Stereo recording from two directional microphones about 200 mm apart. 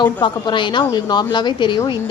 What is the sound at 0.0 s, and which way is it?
A woman's voice, 25° left (ahead or behind).